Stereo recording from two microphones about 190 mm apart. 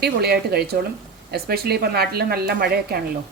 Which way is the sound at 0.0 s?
60° right (ahead or behind).